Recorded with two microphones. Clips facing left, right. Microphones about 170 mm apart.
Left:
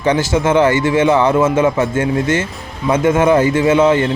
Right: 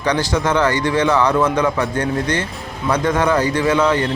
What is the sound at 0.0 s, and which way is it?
A man's voice, 25° left (ahead or behind).